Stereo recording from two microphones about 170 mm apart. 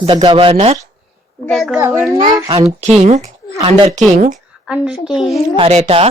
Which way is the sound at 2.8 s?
40° right (ahead or behind).